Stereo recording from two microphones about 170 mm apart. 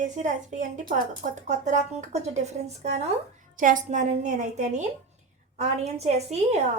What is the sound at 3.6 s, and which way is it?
A woman's voice, 50° right (ahead or behind).